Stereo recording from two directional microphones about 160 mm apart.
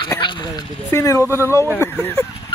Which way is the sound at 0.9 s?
15° left (ahead or behind).